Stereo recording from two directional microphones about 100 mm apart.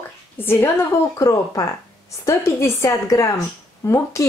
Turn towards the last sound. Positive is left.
turn(degrees=30)  # may be behind; listen again after turning